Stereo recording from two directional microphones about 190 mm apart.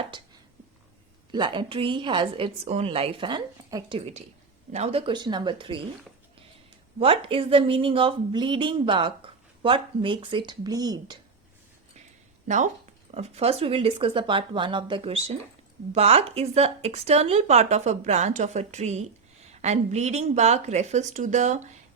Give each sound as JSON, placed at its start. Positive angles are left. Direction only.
{"t": 1.3, "sound": "a woman's voice", "side_deg": -25}
{"t": 7.0, "sound": "a woman's voice", "side_deg": -30}
{"t": 12.5, "sound": "a woman's voice", "side_deg": -40}